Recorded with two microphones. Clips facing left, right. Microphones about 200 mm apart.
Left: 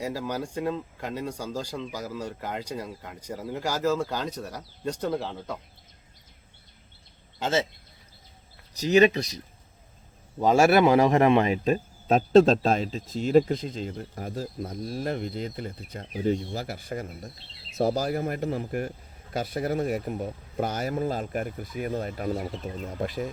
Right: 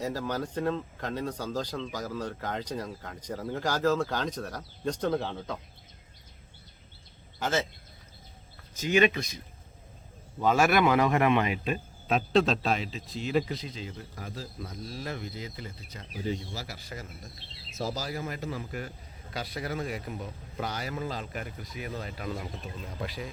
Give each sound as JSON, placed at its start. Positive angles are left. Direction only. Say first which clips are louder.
{"t": 0.0, "sound": "speech", "louder": "left 1 dB", "side_deg": 10}
{"t": 7.3, "sound": "speech", "louder": "left 3 dB", "side_deg": 25}
{"t": 8.7, "sound": "speech", "louder": "left 5 dB", "side_deg": 35}
{"t": 10.4, "sound": "a man's voice", "louder": "left 5 dB", "side_deg": 40}